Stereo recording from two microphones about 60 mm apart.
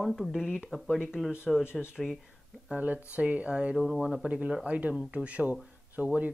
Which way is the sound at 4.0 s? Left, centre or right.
Centre.